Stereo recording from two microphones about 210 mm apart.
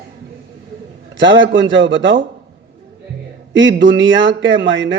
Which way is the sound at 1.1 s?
60° right (ahead or behind).